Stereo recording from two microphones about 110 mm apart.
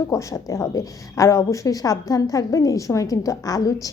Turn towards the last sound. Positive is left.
turn(degrees=30)  # may be behind; listen again after turning